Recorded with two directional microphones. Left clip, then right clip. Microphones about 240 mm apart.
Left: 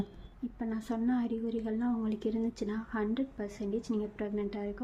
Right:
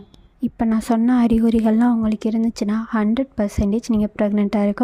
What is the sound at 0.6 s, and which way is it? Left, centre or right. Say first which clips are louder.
A woman's voice: right 16 dB; right.